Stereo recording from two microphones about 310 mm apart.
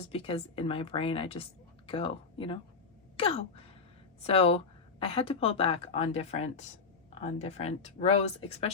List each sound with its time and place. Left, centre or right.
0.0 s a woman's voice: centre